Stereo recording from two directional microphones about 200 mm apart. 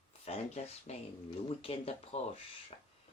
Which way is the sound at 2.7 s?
30° left (ahead or behind).